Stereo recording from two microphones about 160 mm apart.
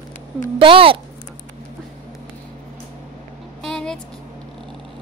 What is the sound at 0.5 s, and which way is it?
Speech, 35° right (ahead or behind).